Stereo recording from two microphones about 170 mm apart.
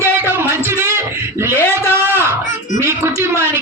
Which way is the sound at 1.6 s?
15° left (ahead or behind).